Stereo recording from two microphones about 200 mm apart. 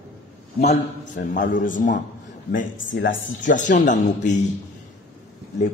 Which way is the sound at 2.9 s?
65° left (ahead or behind).